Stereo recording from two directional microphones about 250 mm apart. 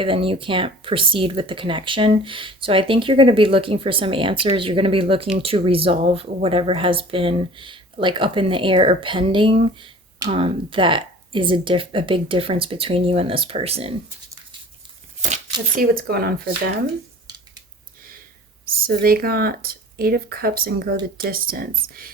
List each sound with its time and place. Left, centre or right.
0.0 s speech: right
15.2 s speech: right
18.9 s speech: right